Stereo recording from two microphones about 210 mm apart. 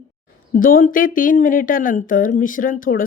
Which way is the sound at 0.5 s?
40° left (ahead or behind).